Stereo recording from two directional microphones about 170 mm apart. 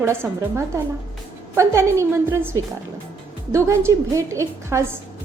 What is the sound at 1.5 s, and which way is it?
A woman's voice, 15° right (ahead or behind).